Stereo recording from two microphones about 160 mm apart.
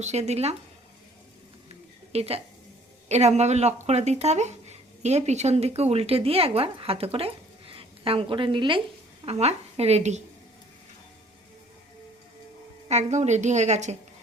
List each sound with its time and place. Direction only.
0.0 s a woman's voice: 45° right (ahead or behind)
2.1 s a woman's voice: 40° right (ahead or behind)
12.9 s a woman's voice: 45° right (ahead or behind)